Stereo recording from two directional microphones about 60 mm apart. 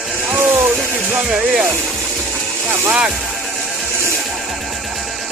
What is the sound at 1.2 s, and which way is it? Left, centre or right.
Speech, centre.